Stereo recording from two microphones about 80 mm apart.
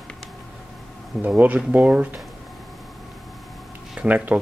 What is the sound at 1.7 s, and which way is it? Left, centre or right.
Speech, centre.